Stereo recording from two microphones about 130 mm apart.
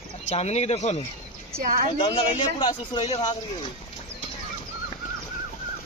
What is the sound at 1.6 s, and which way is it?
Speech, 90° right.